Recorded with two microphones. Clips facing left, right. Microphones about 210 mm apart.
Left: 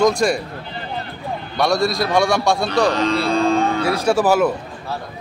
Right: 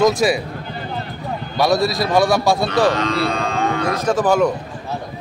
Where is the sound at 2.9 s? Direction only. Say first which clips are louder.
Left 2 dB; 30° left (ahead or behind).